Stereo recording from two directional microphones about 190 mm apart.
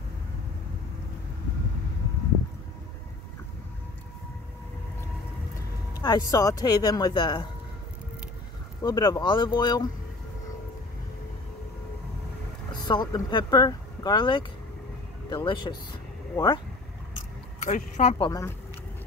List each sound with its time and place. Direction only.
5.9 s speech: 20° left (ahead or behind)
8.8 s speech: 20° left (ahead or behind)
12.8 s speech: 20° left (ahead or behind)
17.6 s speech: 40° left (ahead or behind)
18.1 s speech: 25° left (ahead or behind)